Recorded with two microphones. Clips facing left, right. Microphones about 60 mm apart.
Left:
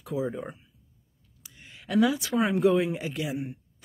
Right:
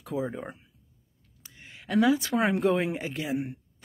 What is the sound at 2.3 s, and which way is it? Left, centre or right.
Speech, right.